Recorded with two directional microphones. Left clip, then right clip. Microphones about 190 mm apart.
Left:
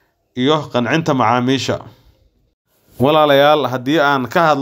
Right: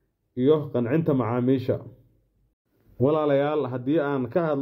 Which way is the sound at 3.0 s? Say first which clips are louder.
Left 11 dB; 30° left (ahead or behind).